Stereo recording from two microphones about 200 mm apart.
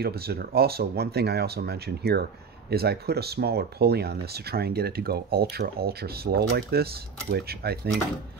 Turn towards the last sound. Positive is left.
turn(degrees=-50)  # may be behind; listen again after turning